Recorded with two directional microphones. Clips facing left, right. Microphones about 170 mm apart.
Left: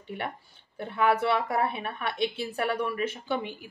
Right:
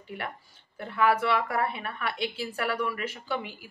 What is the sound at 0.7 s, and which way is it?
Speech, 25° left (ahead or behind).